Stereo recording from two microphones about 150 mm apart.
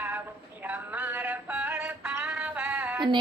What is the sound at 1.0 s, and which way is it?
Male singing, 10° right (ahead or behind).